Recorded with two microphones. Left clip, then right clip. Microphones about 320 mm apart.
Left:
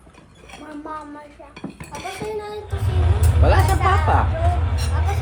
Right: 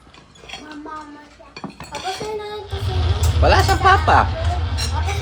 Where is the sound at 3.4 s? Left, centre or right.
Right.